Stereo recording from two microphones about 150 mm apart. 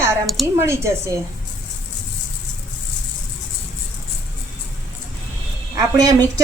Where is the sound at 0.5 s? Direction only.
15° right (ahead or behind).